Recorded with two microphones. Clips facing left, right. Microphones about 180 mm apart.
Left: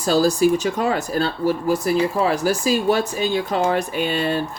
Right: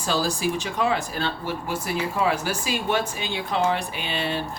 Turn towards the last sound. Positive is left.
turn(degrees=45)  # may be behind; listen again after turning